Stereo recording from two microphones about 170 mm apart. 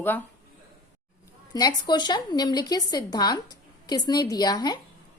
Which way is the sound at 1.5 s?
25° left (ahead or behind).